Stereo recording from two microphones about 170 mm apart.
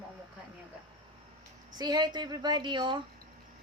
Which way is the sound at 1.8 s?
25° right (ahead or behind).